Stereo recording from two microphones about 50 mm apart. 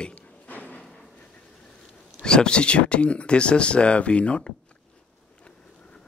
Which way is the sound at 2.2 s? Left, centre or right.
Centre.